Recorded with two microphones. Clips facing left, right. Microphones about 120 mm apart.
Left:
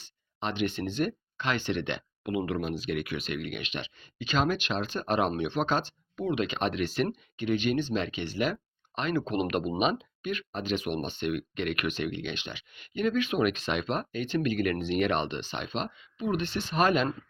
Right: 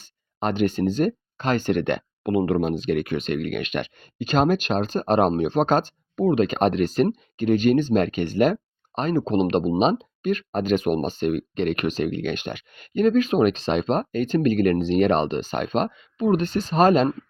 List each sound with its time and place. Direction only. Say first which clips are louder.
0.0 s speech: right 8 dB; 45° right (ahead or behind)